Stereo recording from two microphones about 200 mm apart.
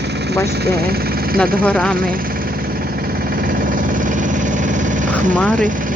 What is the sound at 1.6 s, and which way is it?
Speech, 5° left (ahead or behind).